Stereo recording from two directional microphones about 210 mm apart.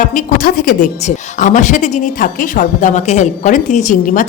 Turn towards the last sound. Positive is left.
turn(degrees=40)  # may be behind; listen again after turning